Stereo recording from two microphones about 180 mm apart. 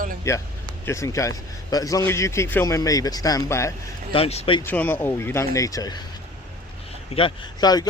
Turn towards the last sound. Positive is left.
turn(degrees=20)  # may be behind; listen again after turning